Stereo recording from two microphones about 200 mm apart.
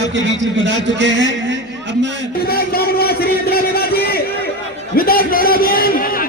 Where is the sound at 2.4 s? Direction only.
50° left (ahead or behind).